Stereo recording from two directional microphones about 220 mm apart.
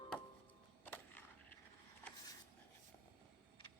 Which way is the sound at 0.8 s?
10° left (ahead or behind).